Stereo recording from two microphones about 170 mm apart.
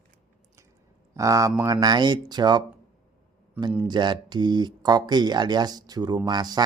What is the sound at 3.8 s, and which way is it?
Speech, 25° right (ahead or behind).